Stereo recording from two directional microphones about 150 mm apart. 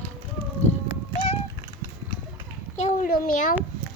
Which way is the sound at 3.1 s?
65° left (ahead or behind).